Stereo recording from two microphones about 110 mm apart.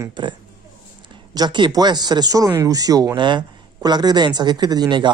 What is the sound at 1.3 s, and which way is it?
Speech, 40° right (ahead or behind).